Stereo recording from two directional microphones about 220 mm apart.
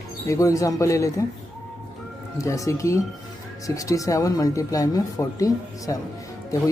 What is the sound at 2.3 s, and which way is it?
Speech, 15° left (ahead or behind).